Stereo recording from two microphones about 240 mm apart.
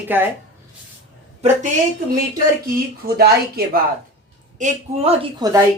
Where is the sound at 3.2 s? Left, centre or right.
Right.